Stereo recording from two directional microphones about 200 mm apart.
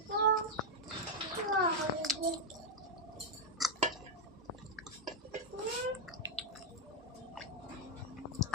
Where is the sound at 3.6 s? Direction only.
Centre (ahead or behind).